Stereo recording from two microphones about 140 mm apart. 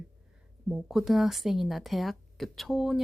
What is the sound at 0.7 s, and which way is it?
A woman's voice, centre (ahead or behind).